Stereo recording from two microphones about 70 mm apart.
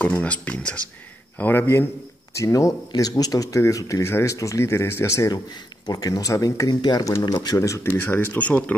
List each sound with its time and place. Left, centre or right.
0.2 s speech: centre
1.4 s speech: left
2.3 s speech: left
2.9 s speech: left
4.0 s speech: left
5.3 s speech: left
7.1 s speech: left
8.0 s speech: left